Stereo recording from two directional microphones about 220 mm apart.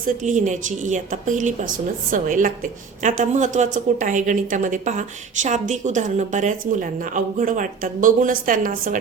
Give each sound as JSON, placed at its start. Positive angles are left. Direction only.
{"t": 0.0, "sound": "a woman's voice", "side_deg": -35}